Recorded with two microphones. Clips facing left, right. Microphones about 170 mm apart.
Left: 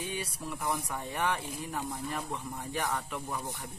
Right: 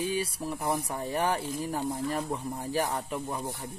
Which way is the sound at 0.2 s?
30° right (ahead or behind).